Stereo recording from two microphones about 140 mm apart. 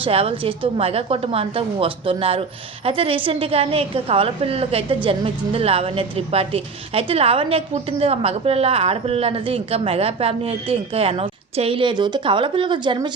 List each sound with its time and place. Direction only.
0.0 s a woman's voice: 45° right (ahead or behind)